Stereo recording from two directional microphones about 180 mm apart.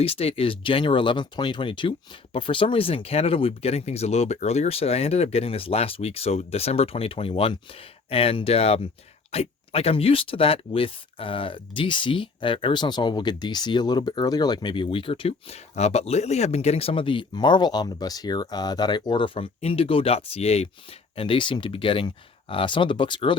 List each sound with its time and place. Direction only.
0.0 s speech: 30° left (ahead or behind)